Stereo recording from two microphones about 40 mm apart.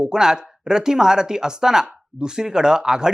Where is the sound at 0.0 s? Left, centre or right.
Centre.